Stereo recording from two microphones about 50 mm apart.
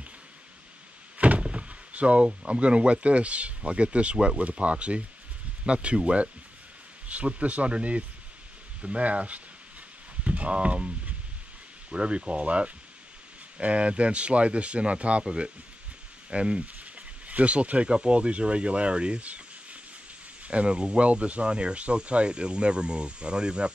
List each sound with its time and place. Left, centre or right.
1.1 s speech: right
10.2 s a sound: right
11.9 s speech: centre